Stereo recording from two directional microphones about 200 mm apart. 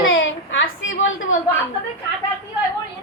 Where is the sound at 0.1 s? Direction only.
75° left (ahead or behind).